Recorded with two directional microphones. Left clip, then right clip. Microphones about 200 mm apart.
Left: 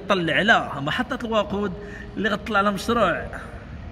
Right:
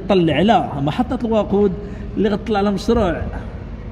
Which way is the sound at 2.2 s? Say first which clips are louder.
Right 3 dB; 15° left (ahead or behind).